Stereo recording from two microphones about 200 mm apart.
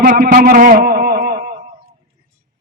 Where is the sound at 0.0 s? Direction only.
45° right (ahead or behind).